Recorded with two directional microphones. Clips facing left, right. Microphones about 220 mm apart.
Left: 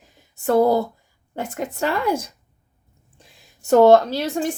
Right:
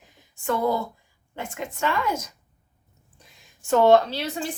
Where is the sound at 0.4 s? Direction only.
40° left (ahead or behind).